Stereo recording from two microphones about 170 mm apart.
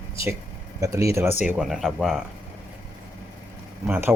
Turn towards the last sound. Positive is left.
turn(degrees=-10)  # may be behind; listen again after turning